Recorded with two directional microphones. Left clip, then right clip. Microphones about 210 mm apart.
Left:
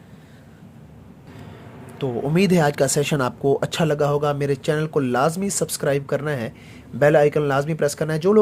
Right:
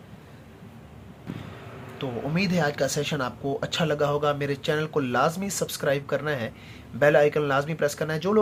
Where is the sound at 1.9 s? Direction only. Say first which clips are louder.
Left 7 dB; 40° left (ahead or behind).